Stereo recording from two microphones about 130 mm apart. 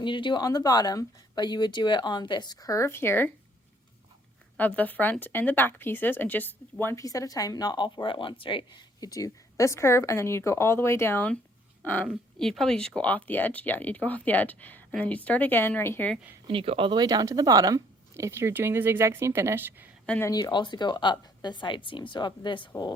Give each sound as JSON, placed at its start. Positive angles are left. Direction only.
{"t": 0.0, "sound": "speech", "side_deg": 40}
{"t": 4.5, "sound": "speech", "side_deg": 15}
{"t": 16.5, "sound": "speech", "side_deg": -45}
{"t": 20.1, "sound": "speech", "side_deg": 15}
{"t": 20.3, "sound": "speech", "side_deg": 35}